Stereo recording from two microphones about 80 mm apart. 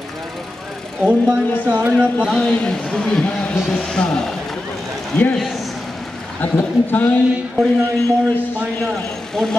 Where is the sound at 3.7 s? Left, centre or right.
Centre.